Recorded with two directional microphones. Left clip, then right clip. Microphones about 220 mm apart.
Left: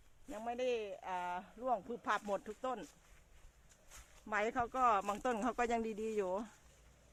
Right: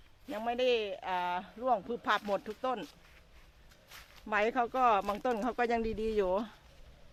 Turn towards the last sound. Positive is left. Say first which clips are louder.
# right 7 dB
turn(degrees=-20)  # may be behind; listen again after turning